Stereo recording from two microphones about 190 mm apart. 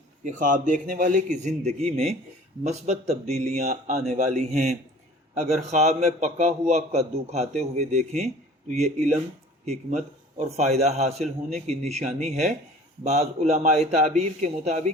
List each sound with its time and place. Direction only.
0.3 s a man's voice: 45° right (ahead or behind)